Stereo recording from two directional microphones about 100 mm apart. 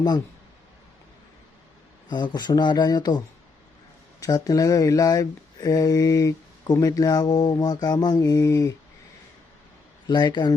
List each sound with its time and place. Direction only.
2.0 s speech: 50° left (ahead or behind)
10.1 s speech: 50° left (ahead or behind)